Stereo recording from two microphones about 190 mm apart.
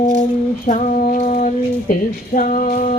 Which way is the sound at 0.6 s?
40° left (ahead or behind).